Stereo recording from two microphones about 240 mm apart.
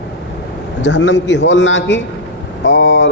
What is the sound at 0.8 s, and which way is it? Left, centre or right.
A woman's voice, left.